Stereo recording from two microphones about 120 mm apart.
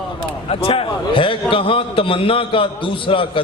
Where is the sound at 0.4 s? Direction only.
50° left (ahead or behind).